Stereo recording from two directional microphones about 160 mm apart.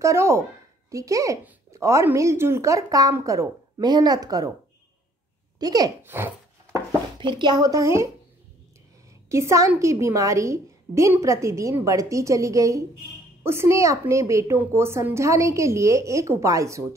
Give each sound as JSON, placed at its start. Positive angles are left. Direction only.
{"t": 0.0, "sound": "speech", "side_deg": -15}
{"t": 5.6, "sound": "speech", "side_deg": -25}
{"t": 6.0, "sound": "a sound", "side_deg": -15}
{"t": 7.2, "sound": "speech", "side_deg": -30}
{"t": 9.3, "sound": "speech", "side_deg": -20}